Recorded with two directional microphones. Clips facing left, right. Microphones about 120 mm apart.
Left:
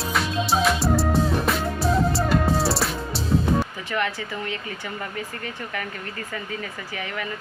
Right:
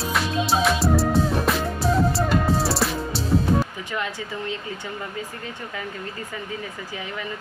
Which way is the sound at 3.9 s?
15° right (ahead or behind).